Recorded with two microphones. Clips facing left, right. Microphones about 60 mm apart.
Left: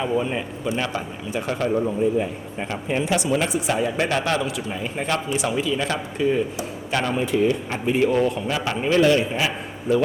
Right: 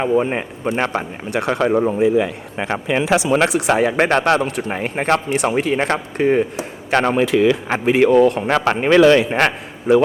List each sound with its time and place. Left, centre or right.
0.2 s speech: right
1.3 s speech: right
2.0 s speech: right
7.2 s speech: right
9.9 s a man's voice: right